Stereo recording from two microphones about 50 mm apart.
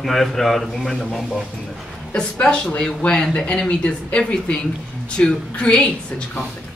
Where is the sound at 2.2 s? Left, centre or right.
Left.